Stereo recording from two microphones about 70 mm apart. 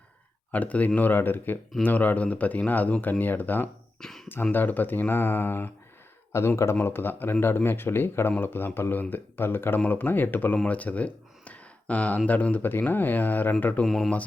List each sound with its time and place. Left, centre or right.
0.5 s speech: left
4.0 s speech: centre
4.5 s speech: left
13.8 s speech: centre